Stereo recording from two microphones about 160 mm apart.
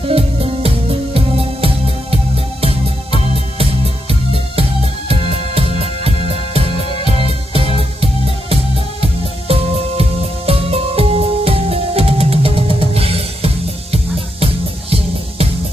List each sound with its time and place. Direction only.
0.1 s music: 35° right (ahead or behind)